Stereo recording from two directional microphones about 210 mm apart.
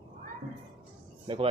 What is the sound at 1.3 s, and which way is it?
Speech, 25° right (ahead or behind).